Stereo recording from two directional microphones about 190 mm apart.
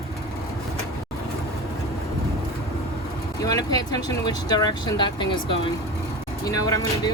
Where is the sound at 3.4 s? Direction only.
20° left (ahead or behind).